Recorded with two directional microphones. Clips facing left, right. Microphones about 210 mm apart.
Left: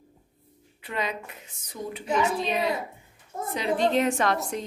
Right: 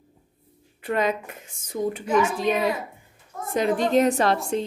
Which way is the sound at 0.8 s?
50° right (ahead or behind).